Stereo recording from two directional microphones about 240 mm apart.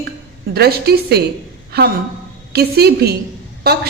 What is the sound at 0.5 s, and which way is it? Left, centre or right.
Speech, right.